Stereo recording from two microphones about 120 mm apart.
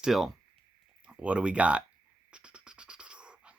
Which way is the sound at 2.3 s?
10° right (ahead or behind).